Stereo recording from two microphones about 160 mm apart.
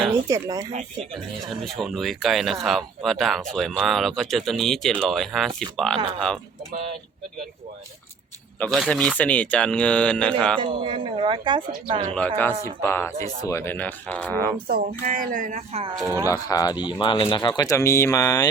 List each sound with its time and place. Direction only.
0.3 s speech: 20° right (ahead or behind)
1.1 s speech: centre (ahead or behind)
8.5 s speech: 10° left (ahead or behind)
10.6 s speech: 30° right (ahead or behind)
12.6 s speech: 15° left (ahead or behind)
14.7 s speech: 65° right (ahead or behind)
16.2 s speech: 20° left (ahead or behind)
17.6 s speech: 20° left (ahead or behind)